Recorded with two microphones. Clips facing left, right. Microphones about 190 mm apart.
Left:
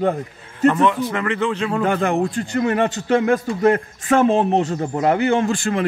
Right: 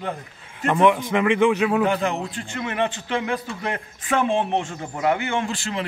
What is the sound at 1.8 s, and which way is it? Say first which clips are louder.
A man's voice: left 4 dB; 50° left (ahead or behind).